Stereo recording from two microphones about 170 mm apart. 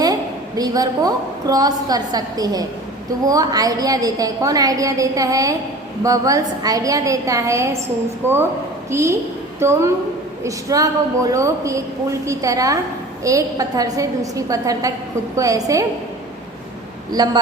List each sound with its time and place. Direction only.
0.0 s a woman's voice: 20° right (ahead or behind)
8.9 s a woman's voice: 15° right (ahead or behind)
17.1 s a woman's voice: 25° right (ahead or behind)